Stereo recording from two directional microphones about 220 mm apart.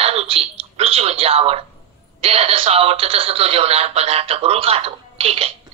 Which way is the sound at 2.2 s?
25° right (ahead or behind).